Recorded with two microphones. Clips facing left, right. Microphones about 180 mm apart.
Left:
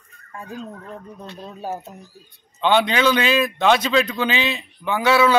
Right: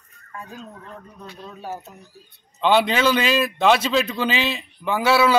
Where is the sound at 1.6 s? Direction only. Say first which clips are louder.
Left 4 dB; 30° left (ahead or behind).